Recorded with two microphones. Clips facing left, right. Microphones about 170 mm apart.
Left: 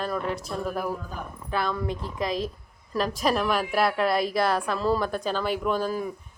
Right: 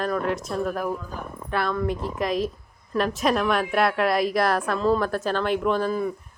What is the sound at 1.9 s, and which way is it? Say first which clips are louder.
Speech: right 5 dB; 45° right (ahead or behind).